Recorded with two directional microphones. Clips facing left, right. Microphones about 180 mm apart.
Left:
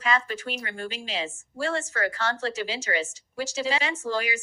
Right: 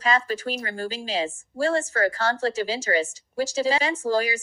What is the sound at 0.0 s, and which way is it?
A woman's voice, 35° right (ahead or behind).